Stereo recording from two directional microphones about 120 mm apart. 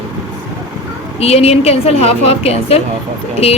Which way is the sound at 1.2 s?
60° left (ahead or behind).